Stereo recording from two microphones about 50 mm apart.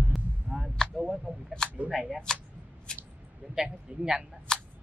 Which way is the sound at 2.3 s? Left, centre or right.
Centre.